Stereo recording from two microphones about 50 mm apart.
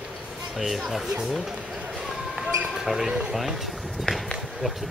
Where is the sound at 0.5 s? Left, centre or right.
Centre.